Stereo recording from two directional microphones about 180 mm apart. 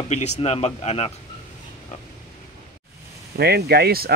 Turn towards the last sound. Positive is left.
turn(degrees=-60)  # may be behind; listen again after turning